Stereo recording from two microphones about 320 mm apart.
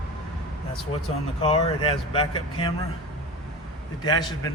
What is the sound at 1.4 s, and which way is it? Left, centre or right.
Speech, centre.